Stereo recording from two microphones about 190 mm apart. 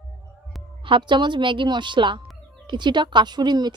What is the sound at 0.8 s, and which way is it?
A woman's voice, 25° right (ahead or behind).